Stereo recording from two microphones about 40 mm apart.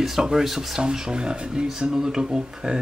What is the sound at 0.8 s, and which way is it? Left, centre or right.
Speech, centre.